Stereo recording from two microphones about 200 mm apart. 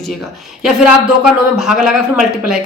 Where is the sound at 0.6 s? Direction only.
5° right (ahead or behind).